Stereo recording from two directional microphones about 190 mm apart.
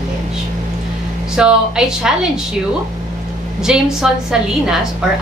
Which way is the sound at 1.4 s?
5° right (ahead or behind).